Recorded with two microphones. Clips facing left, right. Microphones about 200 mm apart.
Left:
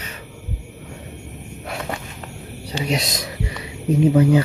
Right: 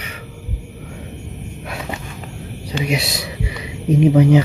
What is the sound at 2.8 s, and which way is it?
Speech, 10° right (ahead or behind).